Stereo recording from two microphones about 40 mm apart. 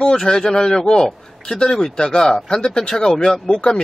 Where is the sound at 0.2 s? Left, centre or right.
Centre.